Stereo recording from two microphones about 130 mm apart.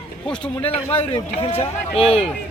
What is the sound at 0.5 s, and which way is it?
Speech, 15° left (ahead or behind).